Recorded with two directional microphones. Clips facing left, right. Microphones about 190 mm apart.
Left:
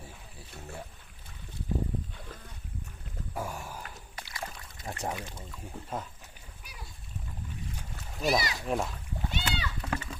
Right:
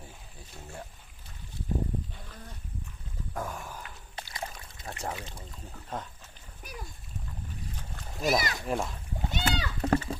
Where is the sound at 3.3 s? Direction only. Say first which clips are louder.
Even; 10° left (ahead or behind).